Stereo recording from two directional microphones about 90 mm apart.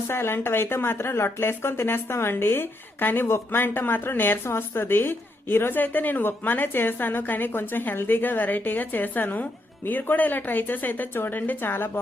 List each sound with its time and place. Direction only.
0.1 s speech: 25° left (ahead or behind)